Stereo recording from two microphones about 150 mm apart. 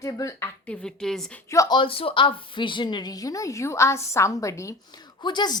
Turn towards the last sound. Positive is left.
turn(degrees=30)  # may be behind; listen again after turning